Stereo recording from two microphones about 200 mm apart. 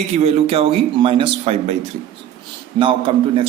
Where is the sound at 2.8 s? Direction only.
25° right (ahead or behind).